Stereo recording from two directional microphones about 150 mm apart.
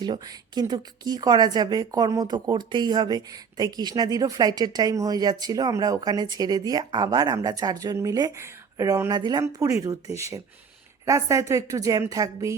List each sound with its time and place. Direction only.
0.0 s speech: 30° right (ahead or behind)